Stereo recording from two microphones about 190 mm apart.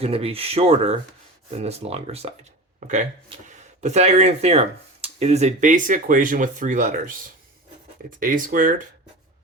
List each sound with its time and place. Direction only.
0.0 s speech: 30° right (ahead or behind)
8.2 s speech: 45° right (ahead or behind)